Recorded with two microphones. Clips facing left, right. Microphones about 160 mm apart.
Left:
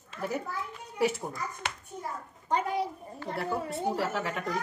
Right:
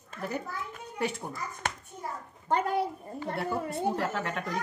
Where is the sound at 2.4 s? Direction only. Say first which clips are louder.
Right 2 dB; 60° right (ahead or behind).